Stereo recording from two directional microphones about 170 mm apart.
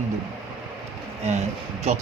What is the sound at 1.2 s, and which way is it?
Speech, 40° right (ahead or behind).